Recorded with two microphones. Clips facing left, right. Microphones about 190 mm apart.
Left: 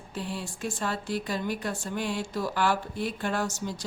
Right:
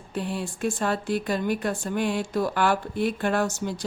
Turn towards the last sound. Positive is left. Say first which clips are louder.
# right 5 dB
turn(degrees=-60)  # may be behind; listen again after turning